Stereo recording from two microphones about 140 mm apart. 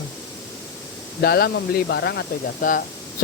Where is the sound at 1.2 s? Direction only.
90° left.